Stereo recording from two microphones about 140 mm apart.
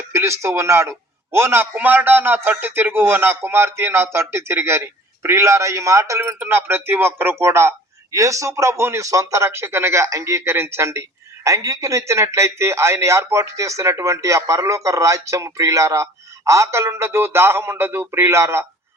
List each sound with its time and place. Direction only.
0.1 s a man's voice: 20° right (ahead or behind)